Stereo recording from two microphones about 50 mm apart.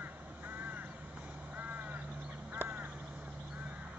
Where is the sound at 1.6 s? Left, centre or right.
Right.